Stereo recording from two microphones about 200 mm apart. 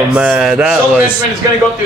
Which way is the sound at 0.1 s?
5° right (ahead or behind).